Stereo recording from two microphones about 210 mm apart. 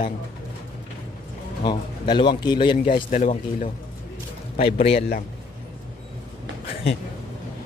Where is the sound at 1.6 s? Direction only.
20° left (ahead or behind).